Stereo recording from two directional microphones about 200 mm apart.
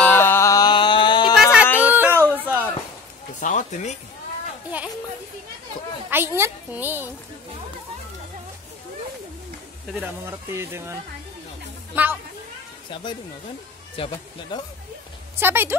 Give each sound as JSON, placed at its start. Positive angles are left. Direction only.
{"t": 0.0, "sound": "mantra", "side_deg": 10}
{"t": 1.3, "sound": "a sound", "side_deg": 0}
{"t": 3.3, "sound": "a sound", "side_deg": 40}
{"t": 6.0, "sound": "speech", "side_deg": -10}
{"t": 9.9, "sound": "speech", "side_deg": -10}
{"t": 12.9, "sound": "speech", "side_deg": 25}
{"t": 15.3, "sound": "speech", "side_deg": -10}